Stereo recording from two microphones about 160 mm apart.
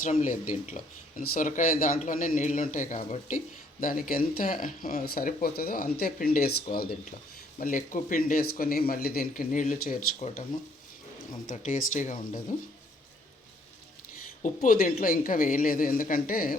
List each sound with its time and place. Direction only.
0.0 s speech: 50° left (ahead or behind)
1.2 s a man's voice: 60° left (ahead or behind)
7.6 s a man's voice: 55° left (ahead or behind)
10.2 s speech: 45° left (ahead or behind)
11.4 s speech: 55° left (ahead or behind)
14.4 s a man's voice: 55° left (ahead or behind)